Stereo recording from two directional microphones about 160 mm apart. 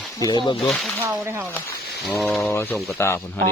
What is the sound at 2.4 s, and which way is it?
Speech, 15° left (ahead or behind).